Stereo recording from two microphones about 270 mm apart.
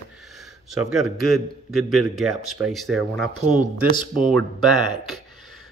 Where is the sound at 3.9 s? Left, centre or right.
Centre.